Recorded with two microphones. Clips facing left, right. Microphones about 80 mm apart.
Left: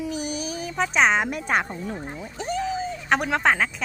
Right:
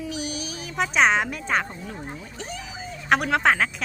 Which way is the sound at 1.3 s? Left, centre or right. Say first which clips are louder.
Left 1 dB; centre.